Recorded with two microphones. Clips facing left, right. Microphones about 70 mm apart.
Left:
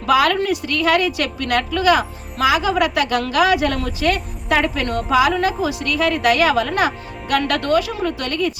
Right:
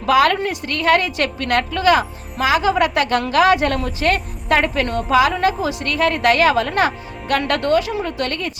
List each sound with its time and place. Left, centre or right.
0.2 s a woman's voice: right